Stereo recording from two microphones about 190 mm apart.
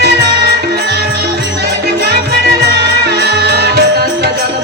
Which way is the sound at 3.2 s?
55° right (ahead or behind).